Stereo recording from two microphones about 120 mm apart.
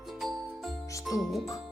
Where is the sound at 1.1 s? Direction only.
25° left (ahead or behind).